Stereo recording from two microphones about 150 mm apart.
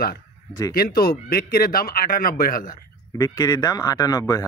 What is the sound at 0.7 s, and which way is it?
A man's voice, 90° left.